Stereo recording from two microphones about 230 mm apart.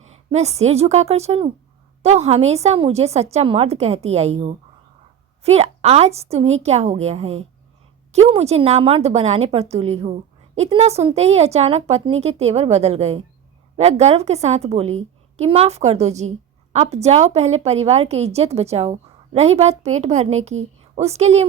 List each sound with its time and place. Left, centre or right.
0.1 s a woman's voice: right